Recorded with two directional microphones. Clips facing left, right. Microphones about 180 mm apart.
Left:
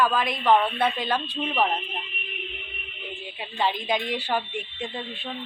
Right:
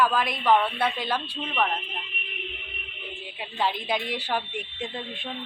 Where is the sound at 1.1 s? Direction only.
20° left (ahead or behind).